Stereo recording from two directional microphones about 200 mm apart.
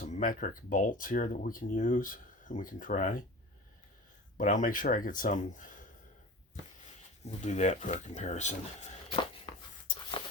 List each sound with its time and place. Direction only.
0.0 s speech: 40° left (ahead or behind)
4.4 s speech: 40° left (ahead or behind)
7.3 s speech: 35° left (ahead or behind)